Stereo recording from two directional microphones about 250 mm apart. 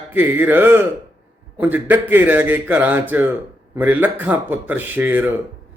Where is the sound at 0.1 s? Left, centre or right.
Centre.